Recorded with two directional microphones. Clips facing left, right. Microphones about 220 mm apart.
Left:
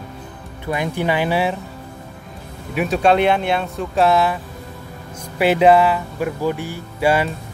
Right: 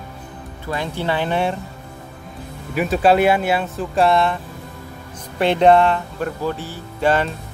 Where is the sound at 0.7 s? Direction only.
15° left (ahead or behind).